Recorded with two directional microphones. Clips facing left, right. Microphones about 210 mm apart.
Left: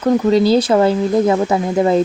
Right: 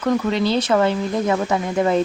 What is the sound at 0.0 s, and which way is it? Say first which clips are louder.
Speech: left 6 dB; 35° left (ahead or behind).